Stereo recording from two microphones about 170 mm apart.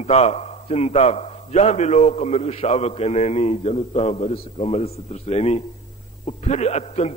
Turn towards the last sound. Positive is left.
turn(degrees=40)  # may be behind; listen again after turning